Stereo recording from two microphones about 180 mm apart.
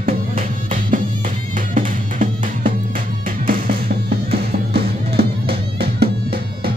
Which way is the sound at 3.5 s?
55° right (ahead or behind).